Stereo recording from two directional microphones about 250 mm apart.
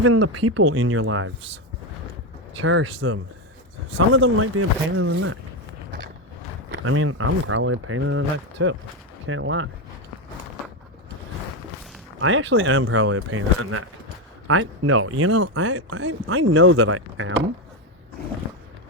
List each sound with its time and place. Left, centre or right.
0.0 s speech: right
2.6 s speech: right
6.7 s speech: right
12.2 s speech: right